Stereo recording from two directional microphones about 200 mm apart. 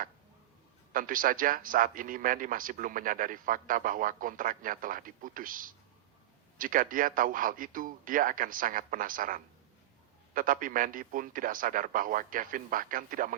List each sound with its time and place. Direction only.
0.9 s a man's voice: 45° right (ahead or behind)